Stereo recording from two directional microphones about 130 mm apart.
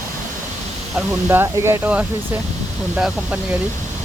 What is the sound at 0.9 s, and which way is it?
Speech, 15° right (ahead or behind).